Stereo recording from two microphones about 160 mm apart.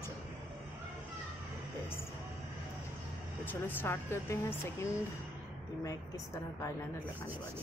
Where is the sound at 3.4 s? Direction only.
15° left (ahead or behind).